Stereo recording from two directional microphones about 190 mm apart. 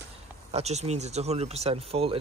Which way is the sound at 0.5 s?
35° right (ahead or behind).